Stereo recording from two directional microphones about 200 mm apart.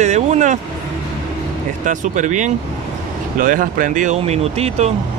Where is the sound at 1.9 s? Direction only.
40° right (ahead or behind).